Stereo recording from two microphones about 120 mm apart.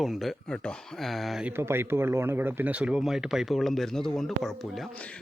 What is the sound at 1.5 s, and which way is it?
Speech, 20° right (ahead or behind).